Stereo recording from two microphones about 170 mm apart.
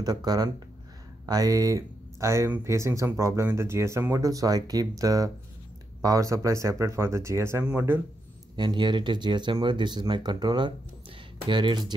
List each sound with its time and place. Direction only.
0.0 s speech: 25° right (ahead or behind)
8.5 s speech: 25° right (ahead or behind)